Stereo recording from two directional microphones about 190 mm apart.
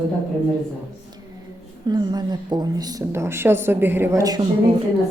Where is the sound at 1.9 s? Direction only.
20° right (ahead or behind).